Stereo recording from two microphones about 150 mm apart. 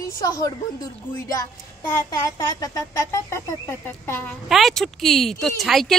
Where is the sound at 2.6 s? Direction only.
20° left (ahead or behind).